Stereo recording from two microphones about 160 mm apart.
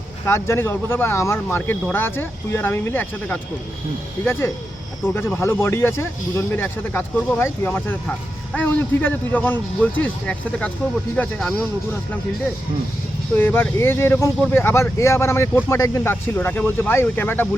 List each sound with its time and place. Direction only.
0.3 s speech: 15° left (ahead or behind)
13.3 s speech: 15° left (ahead or behind)